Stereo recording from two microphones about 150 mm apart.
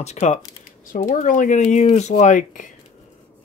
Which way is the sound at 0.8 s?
65° left (ahead or behind).